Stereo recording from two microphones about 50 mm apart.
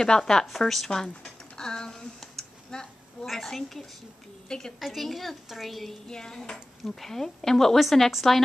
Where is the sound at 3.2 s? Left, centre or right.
Centre.